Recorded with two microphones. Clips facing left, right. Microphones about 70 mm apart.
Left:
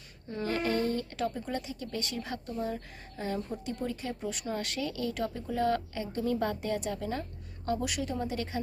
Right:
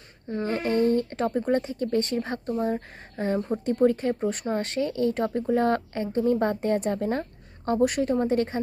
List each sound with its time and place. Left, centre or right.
0.3 s speech: right